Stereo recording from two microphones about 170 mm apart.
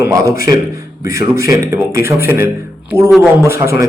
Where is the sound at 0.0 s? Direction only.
20° right (ahead or behind).